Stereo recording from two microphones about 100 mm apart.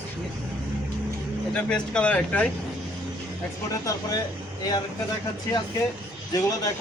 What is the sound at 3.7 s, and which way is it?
Speech, 35° left (ahead or behind).